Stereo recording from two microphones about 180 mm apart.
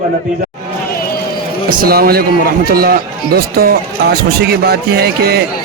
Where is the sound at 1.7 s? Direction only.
55° right (ahead or behind).